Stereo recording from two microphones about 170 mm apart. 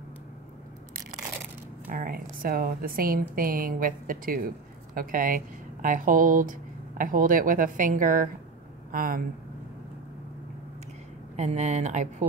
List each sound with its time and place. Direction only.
1.9 s a woman's voice: 55° right (ahead or behind)
11.3 s speech: 40° right (ahead or behind)